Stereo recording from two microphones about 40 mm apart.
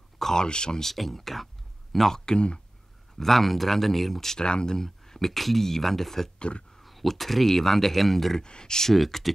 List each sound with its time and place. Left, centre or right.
0.2 s a sound: centre
0.5 s speech: centre
0.8 s speech: centre; by 2.6 s left
3.2 s speech: centre
4.4 s speech: left; by 8.4 s centre
8.4 s speech: centre
8.9 s speech: centre